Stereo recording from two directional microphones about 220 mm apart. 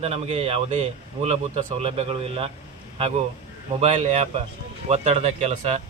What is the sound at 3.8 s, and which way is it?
Speech, 30° right (ahead or behind).